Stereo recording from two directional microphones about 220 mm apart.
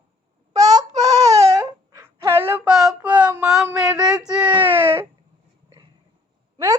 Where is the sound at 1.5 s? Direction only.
15° right (ahead or behind).